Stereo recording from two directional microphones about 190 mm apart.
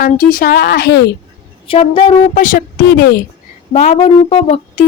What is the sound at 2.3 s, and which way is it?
Speech, 45° left (ahead or behind).